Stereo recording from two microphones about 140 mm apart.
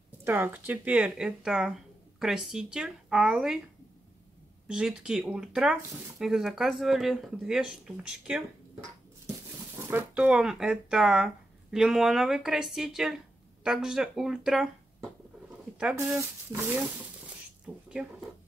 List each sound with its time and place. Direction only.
0.2 s speech: 15° right (ahead or behind)
4.6 s speech: 5° right (ahead or behind)
9.8 s speech: 10° right (ahead or behind)
15.8 s speech: 10° right (ahead or behind)